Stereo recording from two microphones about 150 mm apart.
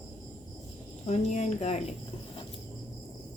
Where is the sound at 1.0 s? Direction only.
50° left (ahead or behind).